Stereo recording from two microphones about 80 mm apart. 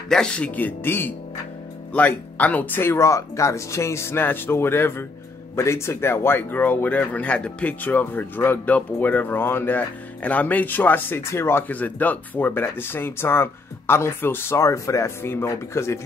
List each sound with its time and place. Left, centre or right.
0.1 s speech: centre; by 16.0 s left